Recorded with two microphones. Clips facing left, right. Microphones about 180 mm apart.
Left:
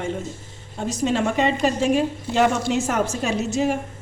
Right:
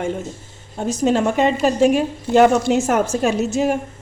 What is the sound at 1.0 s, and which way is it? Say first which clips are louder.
A woman's voice: right 4 dB; 45° right (ahead or behind).